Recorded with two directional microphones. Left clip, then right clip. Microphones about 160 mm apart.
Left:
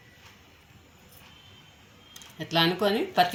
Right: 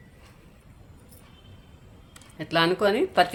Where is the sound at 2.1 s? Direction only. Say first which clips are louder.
Right 2 dB; 65° right (ahead or behind).